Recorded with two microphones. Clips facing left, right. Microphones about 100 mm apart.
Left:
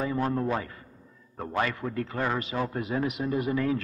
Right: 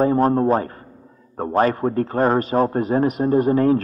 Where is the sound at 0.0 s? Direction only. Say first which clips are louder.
Right 11 dB; 45° right (ahead or behind).